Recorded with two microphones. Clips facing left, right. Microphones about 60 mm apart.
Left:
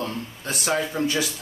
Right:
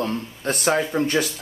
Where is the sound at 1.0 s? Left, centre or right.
Right.